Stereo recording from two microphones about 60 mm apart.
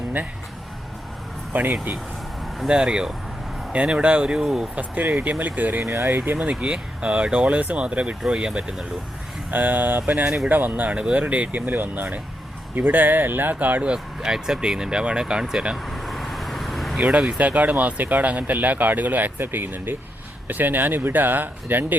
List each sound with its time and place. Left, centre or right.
1.5 s speech: right
2.6 s speech: centre
4.4 s speech: centre
4.7 s speech: right
5.8 s speech: right
6.4 s speech: centre
8.2 s speech: centre
9.5 s speech: right
10.9 s speech: centre
13.9 s speech: centre
15.9 s vehicle: centre
17.0 s speech: centre; by 21.9 s right